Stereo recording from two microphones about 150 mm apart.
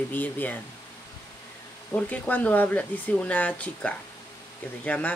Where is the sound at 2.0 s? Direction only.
10° left (ahead or behind).